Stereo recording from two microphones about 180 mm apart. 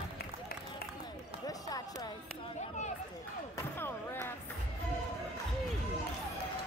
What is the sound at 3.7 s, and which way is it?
Basketball bounce, 10° left (ahead or behind).